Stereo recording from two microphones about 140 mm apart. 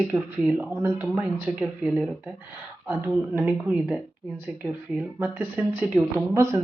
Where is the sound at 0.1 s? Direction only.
15° right (ahead or behind).